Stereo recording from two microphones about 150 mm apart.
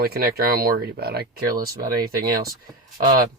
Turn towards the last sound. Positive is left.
turn(degrees=-65)  # may be behind; listen again after turning